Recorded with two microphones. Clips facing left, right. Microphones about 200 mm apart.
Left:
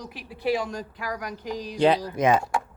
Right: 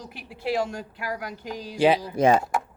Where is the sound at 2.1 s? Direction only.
30° right (ahead or behind).